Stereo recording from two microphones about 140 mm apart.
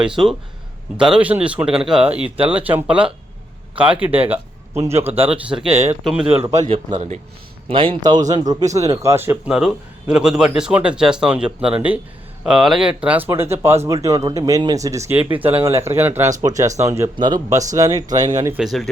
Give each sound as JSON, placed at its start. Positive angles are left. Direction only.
{"t": 0.0, "sound": "speech", "side_deg": -5}
{"t": 5.3, "sound": "speech", "side_deg": -5}
{"t": 5.6, "sound": "speech", "side_deg": -50}
{"t": 7.7, "sound": "a man's voice", "side_deg": -40}
{"t": 9.5, "sound": "speech", "side_deg": -5}
{"t": 17.2, "sound": "speech", "side_deg": -30}
{"t": 18.5, "sound": "speech", "side_deg": 0}